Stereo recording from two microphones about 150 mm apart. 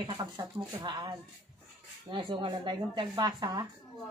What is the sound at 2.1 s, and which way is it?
Speech, 35° right (ahead or behind).